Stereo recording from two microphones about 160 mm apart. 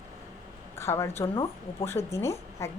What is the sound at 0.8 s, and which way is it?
A woman's voice, 15° left (ahead or behind).